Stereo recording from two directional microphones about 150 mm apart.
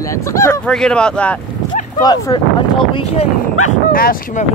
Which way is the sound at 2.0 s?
25° left (ahead or behind).